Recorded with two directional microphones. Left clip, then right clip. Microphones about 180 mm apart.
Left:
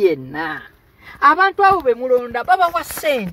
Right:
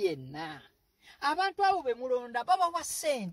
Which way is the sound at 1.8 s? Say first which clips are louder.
Left 15 dB; 20° right (ahead or behind).